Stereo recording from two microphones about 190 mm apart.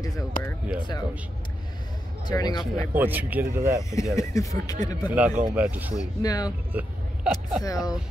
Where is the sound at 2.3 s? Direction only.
20° left (ahead or behind).